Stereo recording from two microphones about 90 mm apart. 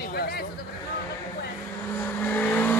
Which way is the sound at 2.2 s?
20° left (ahead or behind).